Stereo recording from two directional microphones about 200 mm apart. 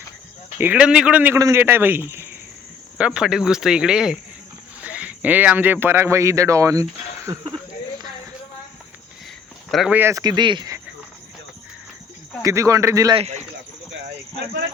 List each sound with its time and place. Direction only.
0.6 s a man's voice: 5° right (ahead or behind)
9.7 s a man's voice: 5° right (ahead or behind); by 10.8 s 20° right (ahead or behind)
12.4 s a man's voice: 15° right (ahead or behind)
13.1 s speech: 35° right (ahead or behind)